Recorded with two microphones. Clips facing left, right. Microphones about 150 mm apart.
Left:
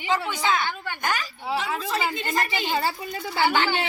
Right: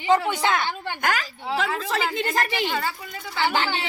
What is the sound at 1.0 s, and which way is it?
Speech, 90° right.